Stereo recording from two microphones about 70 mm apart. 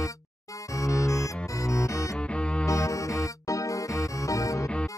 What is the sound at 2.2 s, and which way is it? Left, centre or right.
Music, centre.